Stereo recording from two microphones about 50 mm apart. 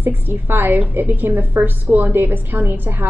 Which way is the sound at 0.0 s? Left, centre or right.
Right.